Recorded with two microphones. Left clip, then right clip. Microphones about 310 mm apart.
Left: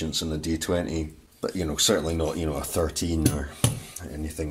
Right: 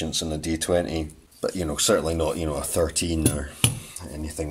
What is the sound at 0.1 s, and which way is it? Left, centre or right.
Speech, centre.